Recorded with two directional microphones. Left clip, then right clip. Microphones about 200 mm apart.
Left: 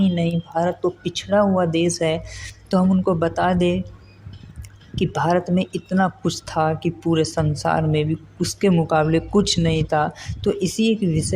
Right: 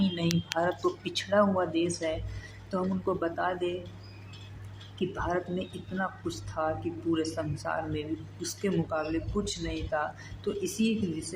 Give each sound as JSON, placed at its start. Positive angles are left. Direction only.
{"t": 0.5, "sound": "speech", "side_deg": 25}
{"t": 4.9, "sound": "speech", "side_deg": 40}